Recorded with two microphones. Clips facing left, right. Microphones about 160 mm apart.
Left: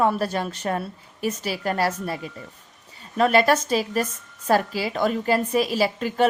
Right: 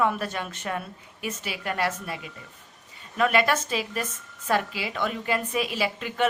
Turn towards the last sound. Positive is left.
turn(degrees=35)  # may be behind; listen again after turning